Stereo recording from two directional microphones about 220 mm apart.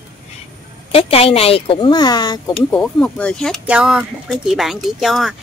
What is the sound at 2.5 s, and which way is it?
Speech, 5° left (ahead or behind).